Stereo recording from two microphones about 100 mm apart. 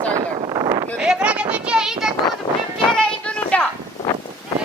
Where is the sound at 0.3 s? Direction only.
50° right (ahead or behind).